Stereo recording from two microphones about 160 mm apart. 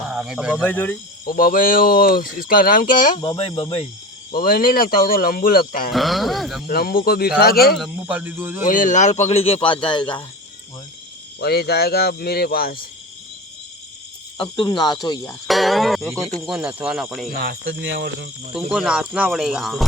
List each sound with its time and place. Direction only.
0.1 s speech: 5° right (ahead or behind)
0.6 s speech: 10° left (ahead or behind)
1.3 s speech: 60° left (ahead or behind)
3.6 s speech: 35° left (ahead or behind)
4.3 s speech: 65° left (ahead or behind)
5.9 s speech: centre (ahead or behind)
6.7 s speech: 70° left (ahead or behind)
7.8 s speech: 5° right (ahead or behind)
8.6 s speech: 55° left (ahead or behind); by 10.2 s 30° left (ahead or behind)
11.3 s speech: 80° left
14.3 s speech: 30° left (ahead or behind)
15.4 s speech: centre (ahead or behind)
17.3 s speech: 90° right
18.7 s speech: 5° right (ahead or behind)